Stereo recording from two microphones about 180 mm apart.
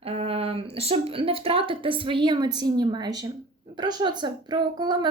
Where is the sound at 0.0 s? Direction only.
35° right (ahead or behind).